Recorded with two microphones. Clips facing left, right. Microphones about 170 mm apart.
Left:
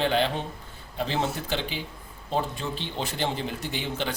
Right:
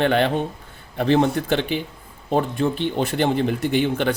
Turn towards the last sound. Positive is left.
turn(degrees=-60)  # may be behind; listen again after turning